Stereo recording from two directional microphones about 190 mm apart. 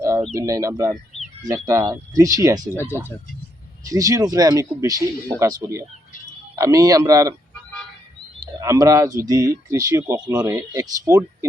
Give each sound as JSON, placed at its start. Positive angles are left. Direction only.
{"t": 0.3, "sound": "speech", "side_deg": -15}
{"t": 3.8, "sound": "speech", "side_deg": -15}
{"t": 8.6, "sound": "speech", "side_deg": -15}